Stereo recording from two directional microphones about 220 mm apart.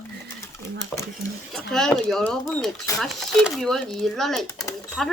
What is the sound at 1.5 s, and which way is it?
A child's voice, centre (ahead or behind).